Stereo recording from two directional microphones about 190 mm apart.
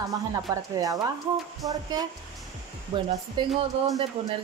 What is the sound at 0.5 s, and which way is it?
A woman's voice, 20° right (ahead or behind).